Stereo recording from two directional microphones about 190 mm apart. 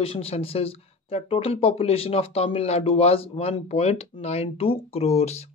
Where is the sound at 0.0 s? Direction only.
30° left (ahead or behind).